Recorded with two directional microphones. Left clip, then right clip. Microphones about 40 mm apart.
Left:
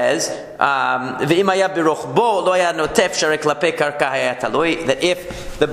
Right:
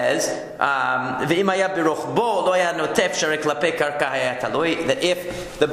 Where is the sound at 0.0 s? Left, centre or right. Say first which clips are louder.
Left 3 dB; left.